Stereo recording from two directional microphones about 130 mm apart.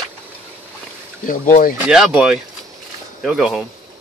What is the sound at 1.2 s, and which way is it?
Speech, 90° left.